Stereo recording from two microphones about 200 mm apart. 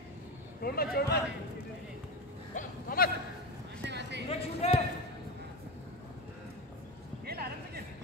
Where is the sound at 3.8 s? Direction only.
60° right (ahead or behind).